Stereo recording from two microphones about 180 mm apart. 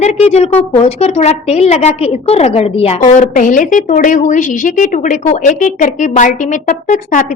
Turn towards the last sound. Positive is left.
turn(degrees=45)  # may be behind; listen again after turning